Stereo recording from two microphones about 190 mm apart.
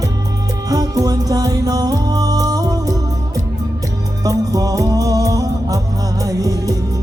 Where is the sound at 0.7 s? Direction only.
20° right (ahead or behind).